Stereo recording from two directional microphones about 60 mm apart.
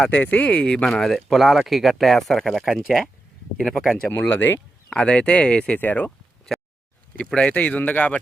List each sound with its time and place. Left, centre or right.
0.1 s speech: left
0.9 s speech: centre
4.1 s speech: left
4.9 s speech: centre
6.1 s a sound: centre
7.3 s speech: centre